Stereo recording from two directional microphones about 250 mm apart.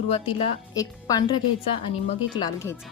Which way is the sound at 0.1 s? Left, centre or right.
Left.